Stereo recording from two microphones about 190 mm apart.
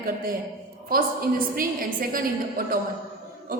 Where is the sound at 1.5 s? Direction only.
50° right (ahead or behind).